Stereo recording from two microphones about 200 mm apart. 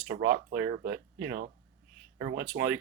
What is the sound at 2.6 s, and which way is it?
Speech, 60° right (ahead or behind).